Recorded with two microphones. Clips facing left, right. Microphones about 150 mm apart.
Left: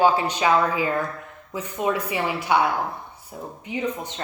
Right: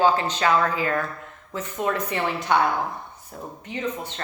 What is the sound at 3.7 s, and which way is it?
Speech, 10° left (ahead or behind).